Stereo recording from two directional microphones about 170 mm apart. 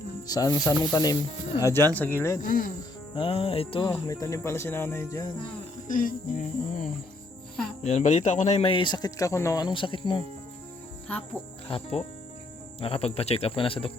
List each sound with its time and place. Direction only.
0.3 s speech: 20° left (ahead or behind)
2.4 s speech: 55° left (ahead or behind)
3.2 s speech: 35° left (ahead or behind)
3.8 s speech: 20° left (ahead or behind)
5.9 s music: 55° left (ahead or behind)
7.9 s speech: 45° left (ahead or behind); by 10.2 s 30° left (ahead or behind)
11.7 s speech: 35° left (ahead or behind)